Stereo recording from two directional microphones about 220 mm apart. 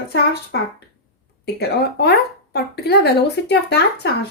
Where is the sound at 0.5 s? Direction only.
50° left (ahead or behind).